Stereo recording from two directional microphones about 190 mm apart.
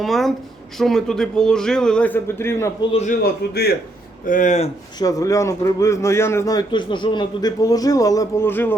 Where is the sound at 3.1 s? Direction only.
55° left (ahead or behind).